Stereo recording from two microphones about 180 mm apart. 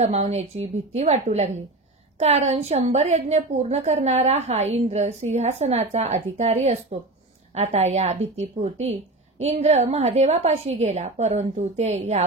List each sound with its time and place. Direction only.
0.0 s a woman's voice: 35° right (ahead or behind)